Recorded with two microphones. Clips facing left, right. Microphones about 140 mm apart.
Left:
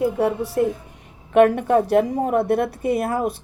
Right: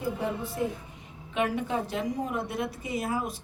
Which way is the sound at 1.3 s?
60° left (ahead or behind).